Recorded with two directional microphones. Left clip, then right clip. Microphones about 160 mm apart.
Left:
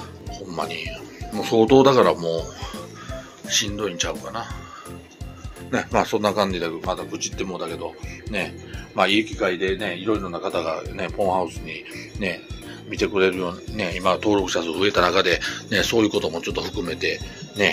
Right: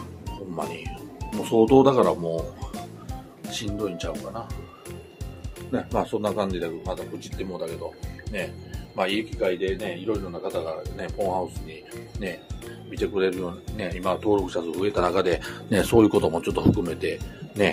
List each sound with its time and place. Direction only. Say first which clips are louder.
0.6 s speech: left 5 dB; 5° right (ahead or behind)
3.4 s speech: left 6 dB; 5° left (ahead or behind)
5.7 s speech: left 5 dB; 15° left (ahead or behind)
8.3 s speech: left 4 dB; 35° left (ahead or behind)
12.9 s speech: left 5 dB; 20° left (ahead or behind); by 15.1 s centre (ahead or behind)
15.1 s speech: left 4 dB; 20° right (ahead or behind); by 16.6 s 40° right (ahead or behind)
16.8 s speech: left 3 dB; 15° right (ahead or behind)